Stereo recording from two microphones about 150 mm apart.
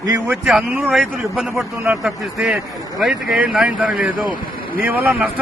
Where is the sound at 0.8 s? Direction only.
Centre (ahead or behind).